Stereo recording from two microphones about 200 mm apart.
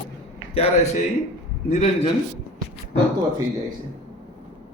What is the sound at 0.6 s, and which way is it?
A man's voice, 35° left (ahead or behind).